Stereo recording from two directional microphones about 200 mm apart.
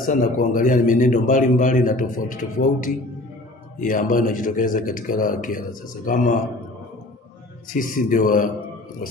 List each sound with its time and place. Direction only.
0.0 s a man's voice: 40° left (ahead or behind)
7.8 s a man's voice: 40° left (ahead or behind)